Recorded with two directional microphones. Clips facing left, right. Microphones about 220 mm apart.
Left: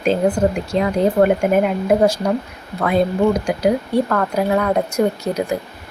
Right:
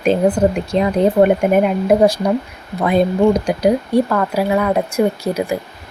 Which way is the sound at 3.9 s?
10° right (ahead or behind).